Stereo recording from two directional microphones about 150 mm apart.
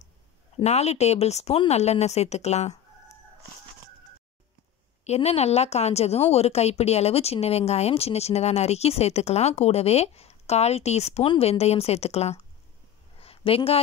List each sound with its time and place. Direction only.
0.6 s a woman's voice: 45° left (ahead or behind)
5.0 s a woman's voice: 45° left (ahead or behind)
13.2 s a sound: 40° left (ahead or behind)